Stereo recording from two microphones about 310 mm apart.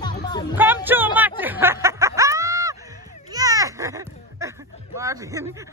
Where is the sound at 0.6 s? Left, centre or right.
Centre.